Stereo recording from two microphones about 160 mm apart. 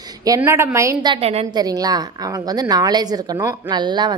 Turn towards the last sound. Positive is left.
turn(degrees=-30)  # may be behind; listen again after turning